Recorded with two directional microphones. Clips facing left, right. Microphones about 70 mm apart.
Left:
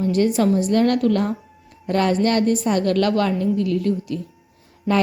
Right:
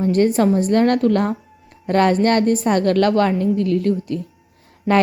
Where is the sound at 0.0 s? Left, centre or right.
Right.